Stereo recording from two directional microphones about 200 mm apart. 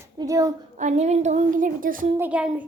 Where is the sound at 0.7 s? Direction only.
35° right (ahead or behind).